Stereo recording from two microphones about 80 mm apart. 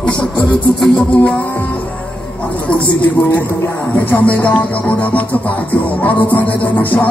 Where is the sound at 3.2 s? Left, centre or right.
Left.